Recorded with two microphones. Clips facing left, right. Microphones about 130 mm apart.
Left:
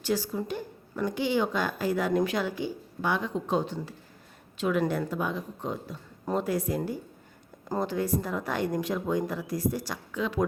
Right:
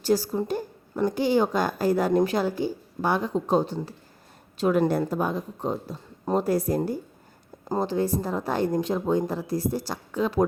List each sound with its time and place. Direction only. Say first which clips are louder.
0.0 s a woman's voice: right 5 dB; 40° right (ahead or behind)
7.7 s a woman's voice: right 3 dB; 30° right (ahead or behind)